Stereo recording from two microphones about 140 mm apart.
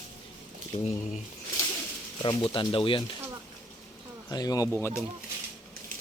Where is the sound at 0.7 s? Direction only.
50° left (ahead or behind).